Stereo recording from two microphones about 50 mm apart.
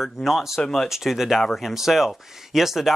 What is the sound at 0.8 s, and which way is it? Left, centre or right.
Speech, centre.